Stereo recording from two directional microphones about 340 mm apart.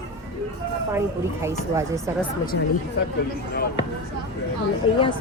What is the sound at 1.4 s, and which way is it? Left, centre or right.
Speech, centre.